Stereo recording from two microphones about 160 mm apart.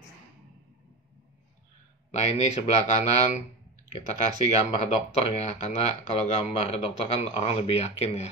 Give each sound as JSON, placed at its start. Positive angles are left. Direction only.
{"t": 2.0, "sound": "speech", "side_deg": 45}
{"t": 4.6, "sound": "speech", "side_deg": 40}